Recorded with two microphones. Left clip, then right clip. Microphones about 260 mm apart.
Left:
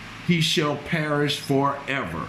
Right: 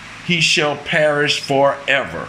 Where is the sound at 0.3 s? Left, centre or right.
Centre.